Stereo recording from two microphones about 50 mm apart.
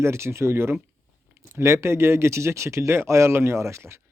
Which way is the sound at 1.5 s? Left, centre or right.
Right.